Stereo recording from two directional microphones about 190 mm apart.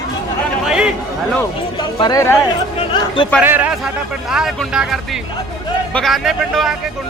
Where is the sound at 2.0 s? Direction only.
20° left (ahead or behind).